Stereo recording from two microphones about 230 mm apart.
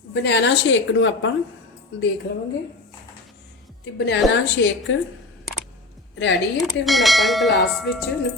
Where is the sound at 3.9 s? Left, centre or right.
Left.